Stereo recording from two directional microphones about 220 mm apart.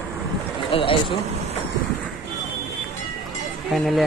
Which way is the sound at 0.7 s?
25° left (ahead or behind).